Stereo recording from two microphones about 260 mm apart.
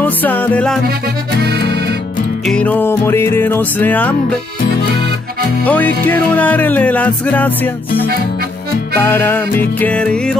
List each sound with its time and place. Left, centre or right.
0.0 s music: centre
1.4 s accordion: right
2.4 s music: centre
5.6 s music: centre
9.0 s music: centre